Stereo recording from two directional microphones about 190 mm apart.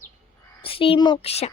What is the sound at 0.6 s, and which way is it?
Speech, 30° left (ahead or behind).